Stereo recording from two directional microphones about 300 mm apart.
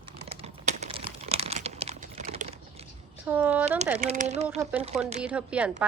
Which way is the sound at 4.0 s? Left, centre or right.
Right.